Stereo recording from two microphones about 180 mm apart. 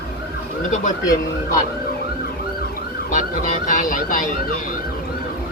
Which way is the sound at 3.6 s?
45° left (ahead or behind).